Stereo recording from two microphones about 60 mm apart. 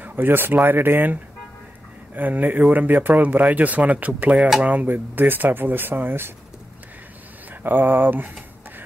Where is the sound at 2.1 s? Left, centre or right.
Right.